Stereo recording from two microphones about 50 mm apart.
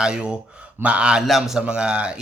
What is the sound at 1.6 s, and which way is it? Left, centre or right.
Speech, centre.